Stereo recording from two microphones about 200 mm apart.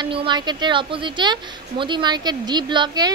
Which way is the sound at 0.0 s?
25° right (ahead or behind).